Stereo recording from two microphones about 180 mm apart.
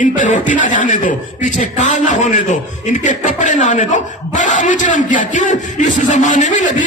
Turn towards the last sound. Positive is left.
turn(degrees=45)  # may be behind; listen again after turning